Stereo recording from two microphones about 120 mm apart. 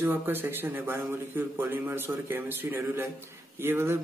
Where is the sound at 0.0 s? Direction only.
15° right (ahead or behind).